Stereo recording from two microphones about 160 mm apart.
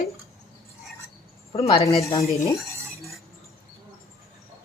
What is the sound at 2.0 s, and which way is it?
Speech, 20° left (ahead or behind).